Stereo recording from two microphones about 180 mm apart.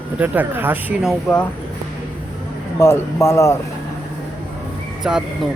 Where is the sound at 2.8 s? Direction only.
15° left (ahead or behind).